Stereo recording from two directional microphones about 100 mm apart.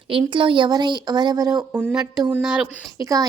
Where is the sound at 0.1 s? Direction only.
55° right (ahead or behind); by 1.5 s 40° right (ahead or behind).